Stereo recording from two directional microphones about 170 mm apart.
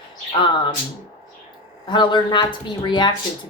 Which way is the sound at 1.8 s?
25° left (ahead or behind).